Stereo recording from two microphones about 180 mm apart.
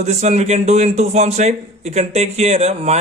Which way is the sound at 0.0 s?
40° right (ahead or behind).